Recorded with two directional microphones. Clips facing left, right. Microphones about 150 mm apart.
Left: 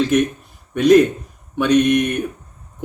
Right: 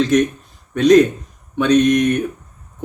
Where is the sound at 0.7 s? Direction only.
10° left (ahead or behind).